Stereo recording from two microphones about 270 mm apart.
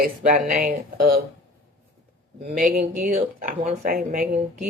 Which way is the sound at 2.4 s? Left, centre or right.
Right.